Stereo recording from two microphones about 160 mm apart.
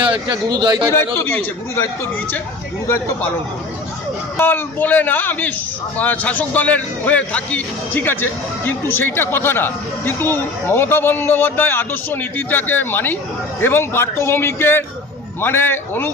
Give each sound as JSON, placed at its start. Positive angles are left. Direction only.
{"t": 0.0, "sound": "a man's voice", "side_deg": -30}
{"t": 0.9, "sound": "a man's voice", "side_deg": 15}
{"t": 4.4, "sound": "a man's voice", "side_deg": 10}